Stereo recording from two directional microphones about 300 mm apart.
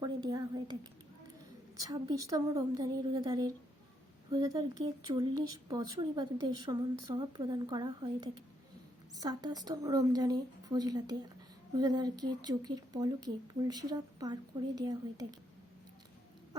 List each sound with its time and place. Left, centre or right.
0.0 s a woman's voice: centre